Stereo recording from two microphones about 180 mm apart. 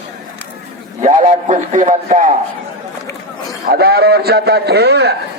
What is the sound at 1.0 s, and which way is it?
A man's voice, 40° right (ahead or behind).